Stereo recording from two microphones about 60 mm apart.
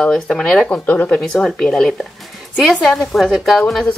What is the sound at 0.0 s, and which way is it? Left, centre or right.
Speech, centre.